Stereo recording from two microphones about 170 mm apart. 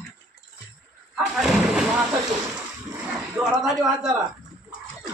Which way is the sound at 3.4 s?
5° right (ahead or behind).